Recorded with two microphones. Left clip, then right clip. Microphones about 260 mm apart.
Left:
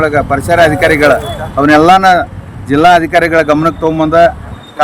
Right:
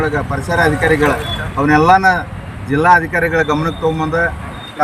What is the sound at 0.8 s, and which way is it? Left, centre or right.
Speech, left.